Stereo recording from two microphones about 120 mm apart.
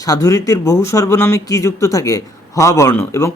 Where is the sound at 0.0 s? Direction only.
30° left (ahead or behind).